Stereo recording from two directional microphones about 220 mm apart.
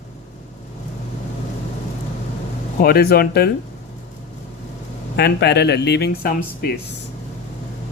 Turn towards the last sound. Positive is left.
turn(degrees=45)  # may be behind; listen again after turning